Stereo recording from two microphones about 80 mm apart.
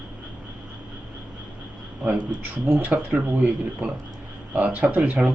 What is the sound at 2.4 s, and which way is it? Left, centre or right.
Speech, right.